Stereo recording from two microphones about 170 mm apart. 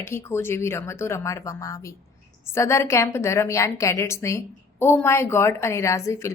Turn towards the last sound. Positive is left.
turn(degrees=15)  # may be behind; listen again after turning